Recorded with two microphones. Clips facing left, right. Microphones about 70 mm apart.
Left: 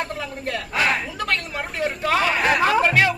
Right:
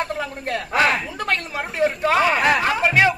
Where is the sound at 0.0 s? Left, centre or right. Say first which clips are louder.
Right 2 dB; right.